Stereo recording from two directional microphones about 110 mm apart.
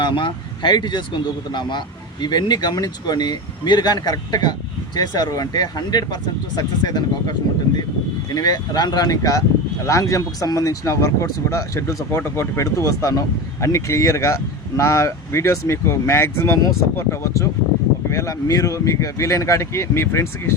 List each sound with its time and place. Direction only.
0.0 s speech: 45° left (ahead or behind); by 20.2 s 25° left (ahead or behind)